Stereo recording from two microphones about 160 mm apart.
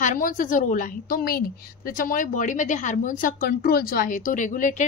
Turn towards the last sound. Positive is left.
turn(degrees=50)  # may be behind; listen again after turning